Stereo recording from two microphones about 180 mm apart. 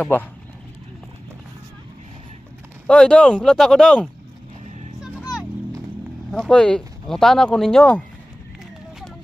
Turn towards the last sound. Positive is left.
turn(degrees=5)  # may be behind; listen again after turning